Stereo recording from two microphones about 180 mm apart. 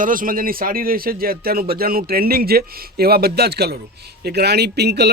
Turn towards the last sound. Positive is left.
turn(degrees=-65)  # may be behind; listen again after turning